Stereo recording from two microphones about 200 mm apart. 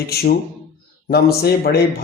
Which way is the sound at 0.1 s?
50° left (ahead or behind).